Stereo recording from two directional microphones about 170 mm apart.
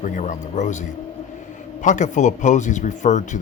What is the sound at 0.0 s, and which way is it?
Speech, 45° left (ahead or behind).